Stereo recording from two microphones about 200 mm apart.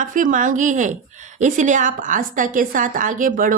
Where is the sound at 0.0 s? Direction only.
40° right (ahead or behind).